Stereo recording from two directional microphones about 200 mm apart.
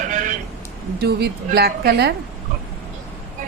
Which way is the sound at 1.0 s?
55° right (ahead or behind).